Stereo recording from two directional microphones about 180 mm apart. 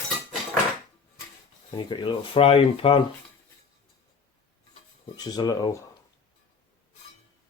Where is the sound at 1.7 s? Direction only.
25° left (ahead or behind).